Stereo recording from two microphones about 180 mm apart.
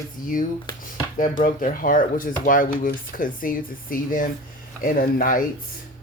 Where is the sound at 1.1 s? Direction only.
50° left (ahead or behind).